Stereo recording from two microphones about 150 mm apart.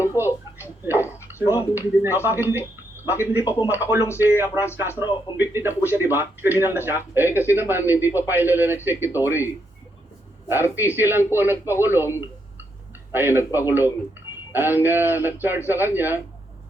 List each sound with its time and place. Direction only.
0.2 s a sound: 15° right (ahead or behind)
0.8 s a man's voice: 15° right (ahead or behind)
10.5 s a man's voice: 15° right (ahead or behind)
13.1 s a man's voice: 15° right (ahead or behind)